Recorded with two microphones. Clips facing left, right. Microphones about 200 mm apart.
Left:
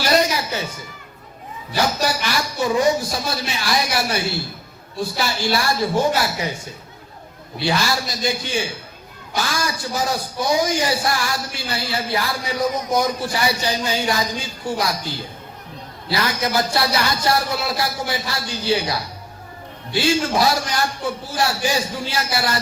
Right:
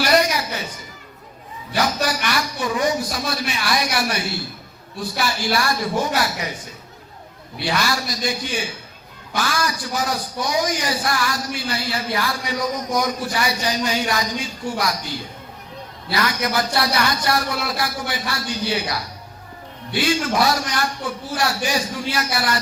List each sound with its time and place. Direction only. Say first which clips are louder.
0.0 s music: even; 25° left (ahead or behind)
1.7 s speech: left 1 dB; 25° left (ahead or behind)
7.6 s speech: left 1 dB; 25° left (ahead or behind)